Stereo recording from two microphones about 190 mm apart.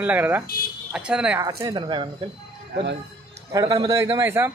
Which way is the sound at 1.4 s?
20° right (ahead or behind).